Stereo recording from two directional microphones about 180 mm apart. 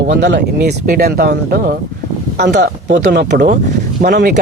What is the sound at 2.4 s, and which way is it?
Speech, 70° right (ahead or behind).